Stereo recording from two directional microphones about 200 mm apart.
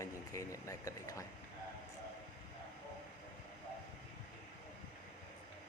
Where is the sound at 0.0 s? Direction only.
15° left (ahead or behind).